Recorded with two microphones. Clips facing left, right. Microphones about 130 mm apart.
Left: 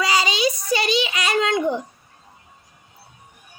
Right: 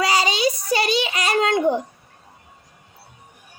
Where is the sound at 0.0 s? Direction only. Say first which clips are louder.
Right 1 dB; 40° right (ahead or behind).